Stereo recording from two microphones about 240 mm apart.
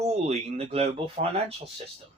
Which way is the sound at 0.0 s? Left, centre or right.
Right.